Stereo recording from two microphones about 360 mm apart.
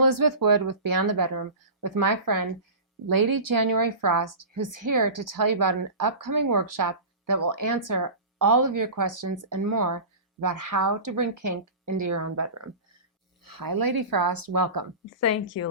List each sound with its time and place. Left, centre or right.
0.0 s a woman's voice: right
13.4 s speech: right
15.2 s speech: left